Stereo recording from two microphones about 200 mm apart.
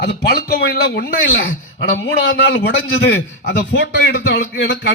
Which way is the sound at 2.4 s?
60° left (ahead or behind).